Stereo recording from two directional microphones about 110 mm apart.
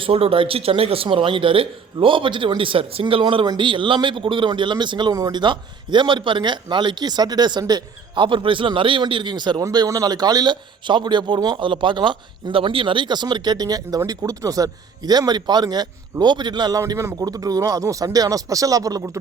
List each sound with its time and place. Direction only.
0.0 s a man's voice: 60° right (ahead or behind)
3.4 s a man's voice: 40° right (ahead or behind)
5.1 s a man's voice: 30° right (ahead or behind)
5.4 s a man's voice: 45° right (ahead or behind)